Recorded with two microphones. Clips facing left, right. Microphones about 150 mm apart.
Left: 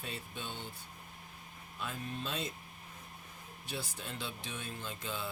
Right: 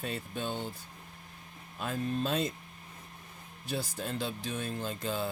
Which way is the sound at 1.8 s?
45° right (ahead or behind).